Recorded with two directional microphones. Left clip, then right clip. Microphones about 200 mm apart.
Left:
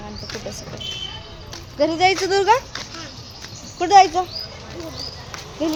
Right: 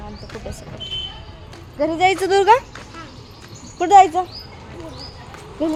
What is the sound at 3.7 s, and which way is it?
Speech, 30° right (ahead or behind).